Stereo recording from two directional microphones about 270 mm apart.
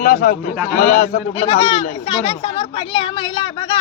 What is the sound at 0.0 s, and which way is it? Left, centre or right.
A man's voice, left.